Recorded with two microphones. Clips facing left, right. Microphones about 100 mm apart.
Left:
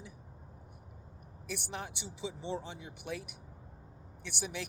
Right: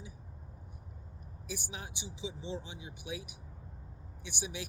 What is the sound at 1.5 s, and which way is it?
Speech, 60° left (ahead or behind).